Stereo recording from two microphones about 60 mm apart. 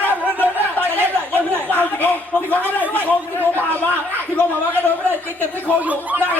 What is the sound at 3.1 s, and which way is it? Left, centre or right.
Speech, left.